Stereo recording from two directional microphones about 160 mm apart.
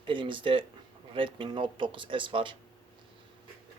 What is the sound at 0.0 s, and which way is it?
Speech, 30° right (ahead or behind).